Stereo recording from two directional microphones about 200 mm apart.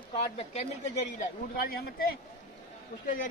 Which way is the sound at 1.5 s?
50° left (ahead or behind).